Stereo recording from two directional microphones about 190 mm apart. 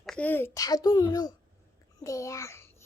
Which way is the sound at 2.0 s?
15° left (ahead or behind).